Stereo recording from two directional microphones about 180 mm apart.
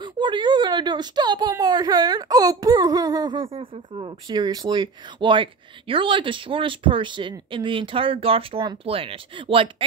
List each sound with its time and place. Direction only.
0.0 s a woman's voice: 25° right (ahead or behind)